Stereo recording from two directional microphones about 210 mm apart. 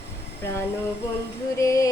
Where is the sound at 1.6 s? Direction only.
15° left (ahead or behind).